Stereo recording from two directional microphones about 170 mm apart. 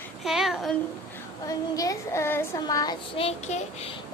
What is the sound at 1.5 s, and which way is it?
Speech, 20° left (ahead or behind).